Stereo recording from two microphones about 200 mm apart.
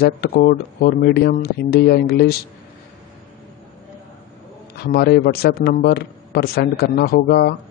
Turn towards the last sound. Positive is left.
turn(degrees=50)  # may be behind; listen again after turning